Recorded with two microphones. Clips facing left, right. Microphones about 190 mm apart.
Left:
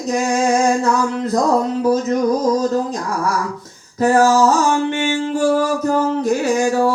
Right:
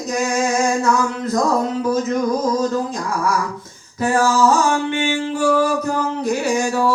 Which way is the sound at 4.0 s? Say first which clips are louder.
Left 4 dB; 40° left (ahead or behind).